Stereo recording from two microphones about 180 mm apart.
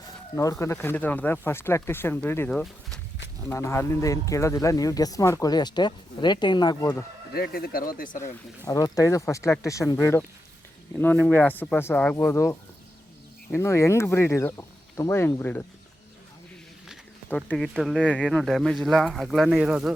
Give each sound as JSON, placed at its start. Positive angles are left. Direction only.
{"t": 0.6, "sound": "speech", "side_deg": 15}
{"t": 3.5, "sound": "speech", "side_deg": 15}
{"t": 7.3, "sound": "speech", "side_deg": 60}
{"t": 8.6, "sound": "speech", "side_deg": 20}
{"t": 17.2, "sound": "speech", "side_deg": 5}